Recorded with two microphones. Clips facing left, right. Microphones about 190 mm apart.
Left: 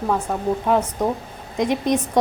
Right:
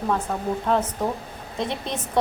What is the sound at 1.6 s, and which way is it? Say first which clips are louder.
Speech: left 8 dB; 15° left (ahead or behind).